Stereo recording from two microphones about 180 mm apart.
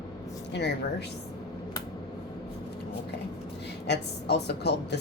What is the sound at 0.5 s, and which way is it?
Speech, 70° left (ahead or behind).